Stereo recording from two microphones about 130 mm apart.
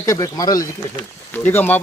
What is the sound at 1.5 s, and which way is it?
Speech, 15° left (ahead or behind).